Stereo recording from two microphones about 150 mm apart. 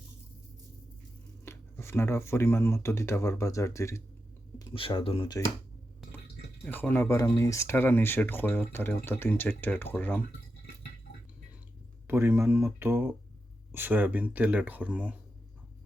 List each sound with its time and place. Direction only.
1.5 s speech: 15° left (ahead or behind)
4.7 s speech: 35° left (ahead or behind)
6.7 s speech: 10° left (ahead or behind)
12.0 s speech: 15° right (ahead or behind)